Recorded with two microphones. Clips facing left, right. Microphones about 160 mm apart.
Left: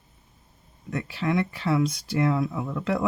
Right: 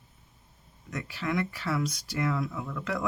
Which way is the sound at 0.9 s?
30° left (ahead or behind).